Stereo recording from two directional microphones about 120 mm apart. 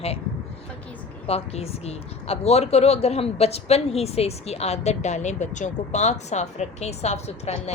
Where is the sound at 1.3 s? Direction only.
60° left (ahead or behind).